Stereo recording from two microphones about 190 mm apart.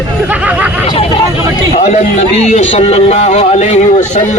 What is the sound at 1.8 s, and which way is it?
Speech, 35° left (ahead or behind).